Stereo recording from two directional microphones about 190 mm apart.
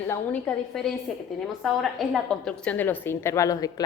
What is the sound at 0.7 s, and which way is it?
A woman's voice, centre (ahead or behind).